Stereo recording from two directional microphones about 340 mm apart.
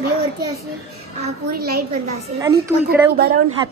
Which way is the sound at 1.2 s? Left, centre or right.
Right.